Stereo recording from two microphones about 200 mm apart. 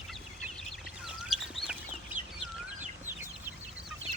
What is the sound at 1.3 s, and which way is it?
Chicken, centre (ahead or behind).